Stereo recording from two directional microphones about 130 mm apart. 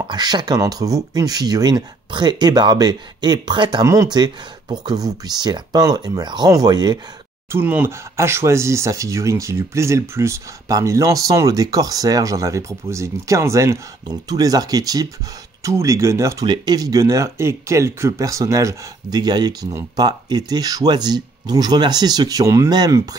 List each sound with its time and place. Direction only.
0.1 s speech: 35° right (ahead or behind)
7.5 s speech: 15° right (ahead or behind)